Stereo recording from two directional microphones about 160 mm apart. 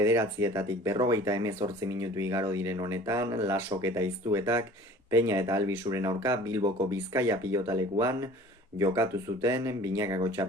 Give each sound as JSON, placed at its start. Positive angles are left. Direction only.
{"t": 0.0, "sound": "speech", "side_deg": -15}